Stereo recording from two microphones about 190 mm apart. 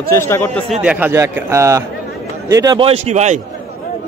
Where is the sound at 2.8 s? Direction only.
35° right (ahead or behind).